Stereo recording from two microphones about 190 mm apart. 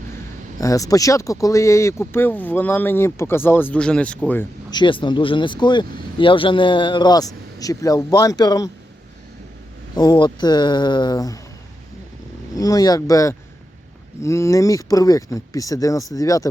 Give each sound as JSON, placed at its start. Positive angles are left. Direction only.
{"t": 0.6, "sound": "speech", "side_deg": 15}
{"t": 4.7, "sound": "speech", "side_deg": 25}
{"t": 9.9, "sound": "speech", "side_deg": 20}
{"t": 12.5, "sound": "speech", "side_deg": 20}